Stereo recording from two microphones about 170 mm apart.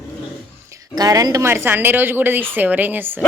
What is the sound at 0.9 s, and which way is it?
Speech, 20° right (ahead or behind).